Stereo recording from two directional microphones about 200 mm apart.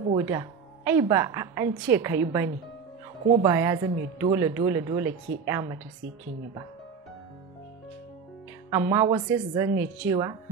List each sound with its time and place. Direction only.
0.2 s a woman's voice: 15° right (ahead or behind)
8.6 s a woman's voice: 15° right (ahead or behind)